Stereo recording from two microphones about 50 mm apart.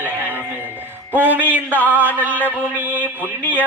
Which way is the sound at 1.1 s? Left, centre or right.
Right.